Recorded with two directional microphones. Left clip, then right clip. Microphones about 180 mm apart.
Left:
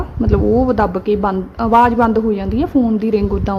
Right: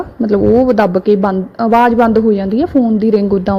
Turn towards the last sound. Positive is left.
turn(degrees=-25)  # may be behind; listen again after turning